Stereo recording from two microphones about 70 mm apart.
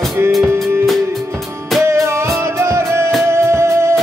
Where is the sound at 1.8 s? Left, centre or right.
Right.